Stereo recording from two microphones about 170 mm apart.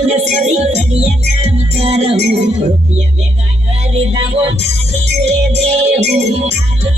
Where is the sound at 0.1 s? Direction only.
40° right (ahead or behind).